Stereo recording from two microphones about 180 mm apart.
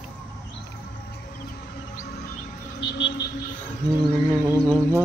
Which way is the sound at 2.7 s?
75° left (ahead or behind).